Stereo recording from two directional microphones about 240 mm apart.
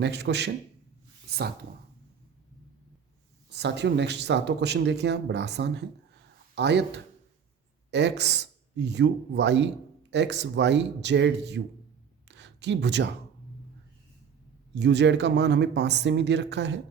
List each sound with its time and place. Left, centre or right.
0.0 s speech: right
3.5 s speech: right
12.3 s a sound: right
14.8 s speech: right